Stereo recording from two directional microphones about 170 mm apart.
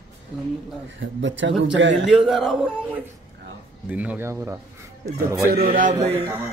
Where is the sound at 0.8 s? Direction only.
90° right.